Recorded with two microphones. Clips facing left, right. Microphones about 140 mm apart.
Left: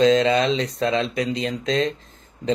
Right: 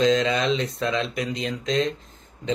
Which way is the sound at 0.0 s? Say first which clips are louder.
Left 4 dB; 35° left (ahead or behind).